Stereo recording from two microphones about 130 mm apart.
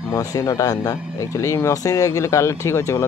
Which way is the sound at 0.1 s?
30° left (ahead or behind).